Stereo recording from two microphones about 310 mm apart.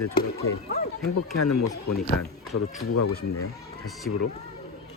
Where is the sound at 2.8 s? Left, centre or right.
Left.